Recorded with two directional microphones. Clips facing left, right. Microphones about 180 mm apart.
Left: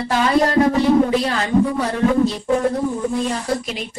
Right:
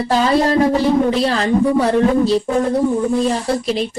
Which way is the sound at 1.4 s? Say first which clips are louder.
Right 3 dB; 35° right (ahead or behind).